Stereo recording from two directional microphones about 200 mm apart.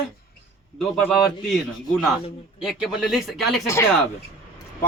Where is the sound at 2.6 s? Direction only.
Centre (ahead or behind).